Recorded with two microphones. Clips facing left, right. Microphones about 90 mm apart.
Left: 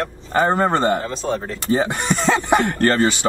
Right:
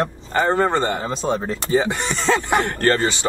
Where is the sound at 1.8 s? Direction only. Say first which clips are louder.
Left 2 dB; 20° left (ahead or behind).